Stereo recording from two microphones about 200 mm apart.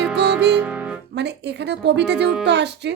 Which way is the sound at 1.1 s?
60° right (ahead or behind).